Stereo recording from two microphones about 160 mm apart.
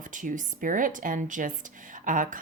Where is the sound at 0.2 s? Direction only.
55° right (ahead or behind).